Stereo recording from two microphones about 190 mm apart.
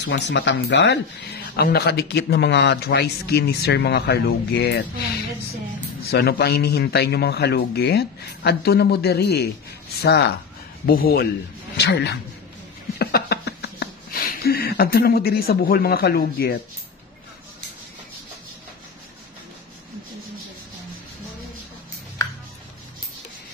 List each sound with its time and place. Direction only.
0.0 s speech: 65° left (ahead or behind)
6.0 s speech: 60° left (ahead or behind)
10.9 s speech: 55° left (ahead or behind)
11.7 s speech: 65° left (ahead or behind)
13.0 s a sound: 60° left (ahead or behind)